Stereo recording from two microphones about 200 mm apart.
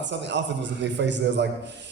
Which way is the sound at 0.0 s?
60° right (ahead or behind).